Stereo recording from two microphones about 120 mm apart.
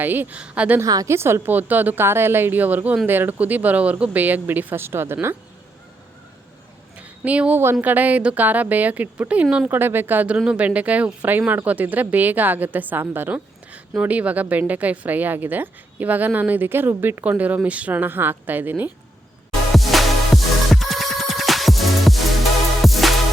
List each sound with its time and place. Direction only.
0.0 s a woman's voice: 15° right (ahead or behind)
0.8 s a woman's voice: 25° right (ahead or behind)
7.3 s a woman's voice: 10° right (ahead or behind)
19.7 s music: centre (ahead or behind)